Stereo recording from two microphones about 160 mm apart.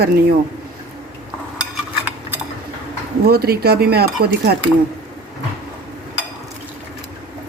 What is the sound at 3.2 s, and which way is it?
Speech, 75° right (ahead or behind).